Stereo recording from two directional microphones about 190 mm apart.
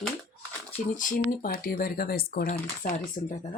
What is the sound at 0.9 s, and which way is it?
Speech, 45° left (ahead or behind).